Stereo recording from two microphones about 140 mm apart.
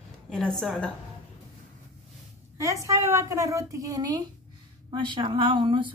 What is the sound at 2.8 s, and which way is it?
A woman's voice, 20° right (ahead or behind).